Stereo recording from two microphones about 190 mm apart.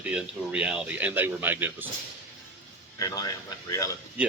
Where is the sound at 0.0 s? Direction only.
5° right (ahead or behind).